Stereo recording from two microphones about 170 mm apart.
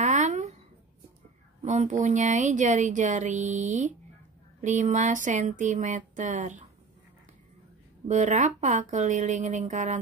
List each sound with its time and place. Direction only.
0.0 s a sound: 45° right (ahead or behind)
1.6 s speech: 45° right (ahead or behind)
8.1 s speech: 45° right (ahead or behind)